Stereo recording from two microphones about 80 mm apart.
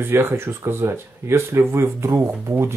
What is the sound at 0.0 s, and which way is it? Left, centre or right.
Speech, right.